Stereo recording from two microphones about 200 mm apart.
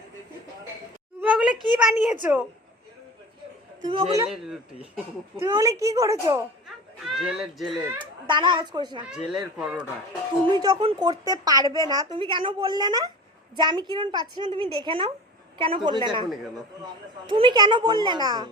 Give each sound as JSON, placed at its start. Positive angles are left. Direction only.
{"t": 1.2, "sound": "a woman's voice", "side_deg": -5}
{"t": 3.8, "sound": "a woman's voice", "side_deg": -25}
{"t": 4.3, "sound": "speech", "side_deg": 0}
{"t": 5.4, "sound": "a woman's voice", "side_deg": -15}
{"t": 7.0, "sound": "speech", "side_deg": 0}
{"t": 7.9, "sound": "a woman's voice", "side_deg": -25}
{"t": 9.0, "sound": "speech", "side_deg": -5}
{"t": 10.5, "sound": "a woman's voice", "side_deg": -20}